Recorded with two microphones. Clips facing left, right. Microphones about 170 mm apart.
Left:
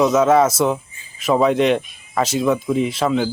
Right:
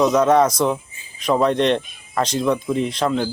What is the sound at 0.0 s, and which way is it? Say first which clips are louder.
Speech: left 1 dB; centre (ahead or behind).